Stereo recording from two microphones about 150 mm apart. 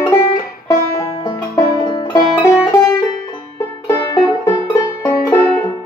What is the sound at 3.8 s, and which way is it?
Music, 20° left (ahead or behind).